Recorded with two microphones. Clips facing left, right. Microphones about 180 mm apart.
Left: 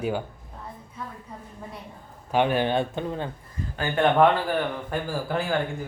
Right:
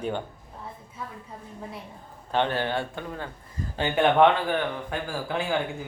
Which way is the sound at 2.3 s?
15° left (ahead or behind).